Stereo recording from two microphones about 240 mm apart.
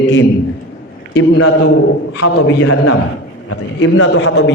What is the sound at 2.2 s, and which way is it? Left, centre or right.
Speech, left.